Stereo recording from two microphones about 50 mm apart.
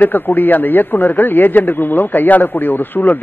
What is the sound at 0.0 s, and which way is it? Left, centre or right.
A man's voice, left.